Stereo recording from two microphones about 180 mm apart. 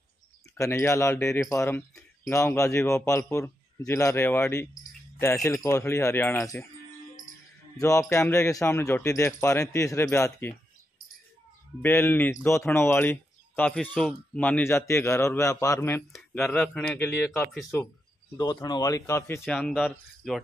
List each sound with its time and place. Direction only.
0.6 s speech: 15° left (ahead or behind)
7.7 s speech: 15° left (ahead or behind)
11.8 s speech: 10° left (ahead or behind)
16.1 s speech: centre (ahead or behind)
18.4 s speech: 20° left (ahead or behind)
19.4 s speech: 5° left (ahead or behind)